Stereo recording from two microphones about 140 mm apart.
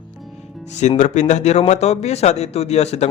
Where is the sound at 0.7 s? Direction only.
55° left (ahead or behind).